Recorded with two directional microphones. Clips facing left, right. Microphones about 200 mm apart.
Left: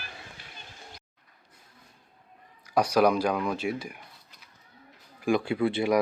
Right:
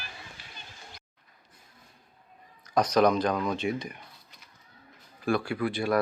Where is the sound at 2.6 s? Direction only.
10° left (ahead or behind).